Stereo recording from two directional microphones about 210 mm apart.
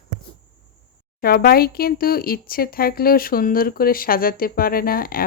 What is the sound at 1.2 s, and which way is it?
Speech, 45° left (ahead or behind).